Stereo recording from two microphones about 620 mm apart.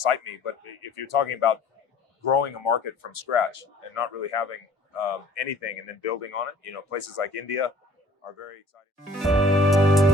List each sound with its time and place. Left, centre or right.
0.0 s speech: left
9.1 s music: centre